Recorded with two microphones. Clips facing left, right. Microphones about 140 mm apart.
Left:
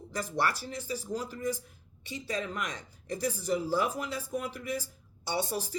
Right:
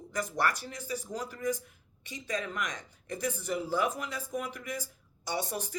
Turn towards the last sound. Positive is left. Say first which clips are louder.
# left 2 dB
turn(degrees=35)  # may be behind; listen again after turning